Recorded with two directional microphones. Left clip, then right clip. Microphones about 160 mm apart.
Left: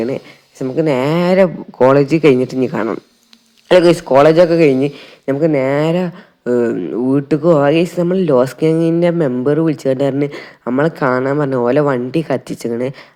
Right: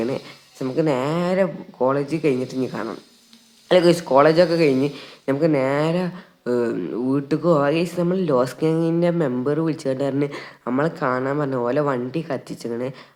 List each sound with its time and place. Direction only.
0.6 s speech: 25° left (ahead or behind)
3.7 s speech: 25° left (ahead or behind)